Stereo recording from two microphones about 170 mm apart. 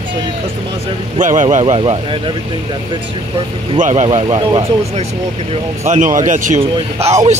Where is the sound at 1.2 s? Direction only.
45° right (ahead or behind).